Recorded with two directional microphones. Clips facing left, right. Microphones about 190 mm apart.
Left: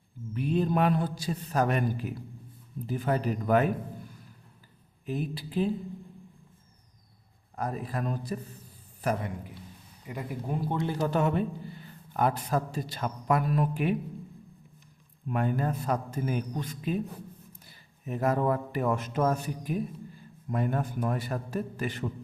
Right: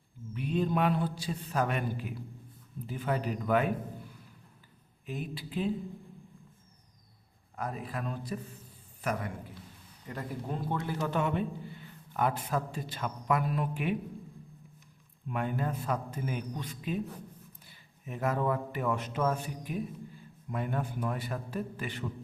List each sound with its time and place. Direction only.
0.3 s a man's voice: 40° left (ahead or behind)
5.0 s a man's voice: 40° left (ahead or behind)
7.5 s a man's voice: 40° left (ahead or behind)
10.1 s a man's voice: 15° left (ahead or behind)
10.8 s a man's voice: 35° left (ahead or behind)
15.3 s a man's voice: 40° left (ahead or behind)